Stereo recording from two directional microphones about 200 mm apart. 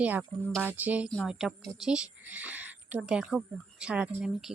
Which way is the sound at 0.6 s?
10° right (ahead or behind).